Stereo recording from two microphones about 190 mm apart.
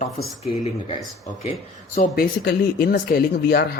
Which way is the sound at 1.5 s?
45° left (ahead or behind).